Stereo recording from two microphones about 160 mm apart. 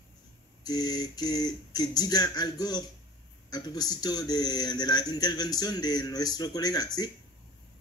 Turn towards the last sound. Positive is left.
turn(degrees=25)  # may be behind; listen again after turning